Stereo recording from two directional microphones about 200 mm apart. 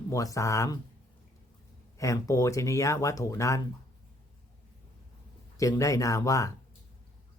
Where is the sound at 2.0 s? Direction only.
15° left (ahead or behind).